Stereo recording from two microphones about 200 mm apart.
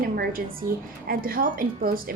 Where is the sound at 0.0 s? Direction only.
45° right (ahead or behind).